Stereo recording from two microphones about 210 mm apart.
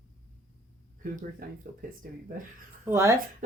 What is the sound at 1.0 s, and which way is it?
Speech, 40° right (ahead or behind).